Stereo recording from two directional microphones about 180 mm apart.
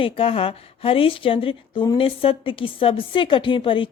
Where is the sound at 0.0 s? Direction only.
30° left (ahead or behind).